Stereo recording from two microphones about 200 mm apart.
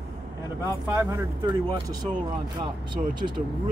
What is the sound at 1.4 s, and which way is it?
Speech, 25° right (ahead or behind).